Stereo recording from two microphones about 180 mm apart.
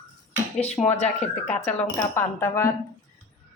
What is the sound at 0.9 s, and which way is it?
Speech, 40° left (ahead or behind).